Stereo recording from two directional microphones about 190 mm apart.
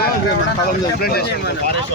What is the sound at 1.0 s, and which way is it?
Speech, 55° left (ahead or behind).